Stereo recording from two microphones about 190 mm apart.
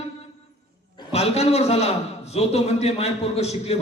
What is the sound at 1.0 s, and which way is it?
A man's voice, 30° left (ahead or behind).